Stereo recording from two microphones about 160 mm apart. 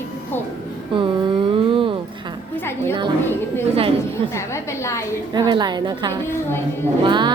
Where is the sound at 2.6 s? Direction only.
15° left (ahead or behind).